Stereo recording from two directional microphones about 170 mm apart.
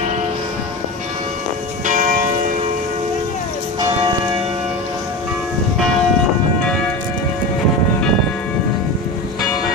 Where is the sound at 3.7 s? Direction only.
25° right (ahead or behind).